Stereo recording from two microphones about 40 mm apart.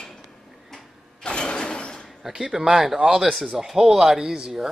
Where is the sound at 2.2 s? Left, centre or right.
Centre.